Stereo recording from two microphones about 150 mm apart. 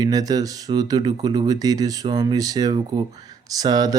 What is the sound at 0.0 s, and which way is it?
Speech, 25° right (ahead or behind).